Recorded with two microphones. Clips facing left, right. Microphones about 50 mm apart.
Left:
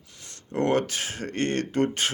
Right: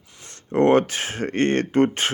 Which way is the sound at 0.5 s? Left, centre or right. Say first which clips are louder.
Right 7 dB; right.